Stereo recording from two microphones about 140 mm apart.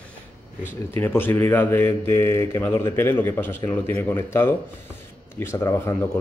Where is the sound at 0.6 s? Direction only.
15° left (ahead or behind).